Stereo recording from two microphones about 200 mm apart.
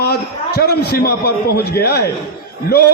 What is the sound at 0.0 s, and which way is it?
A man's voice, 50° left (ahead or behind).